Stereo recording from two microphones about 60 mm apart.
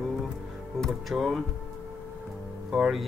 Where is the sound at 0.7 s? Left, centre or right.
Centre.